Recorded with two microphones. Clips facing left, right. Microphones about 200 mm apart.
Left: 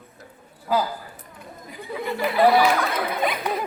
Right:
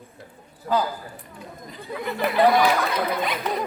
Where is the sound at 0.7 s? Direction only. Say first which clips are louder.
Even; 5° left (ahead or behind).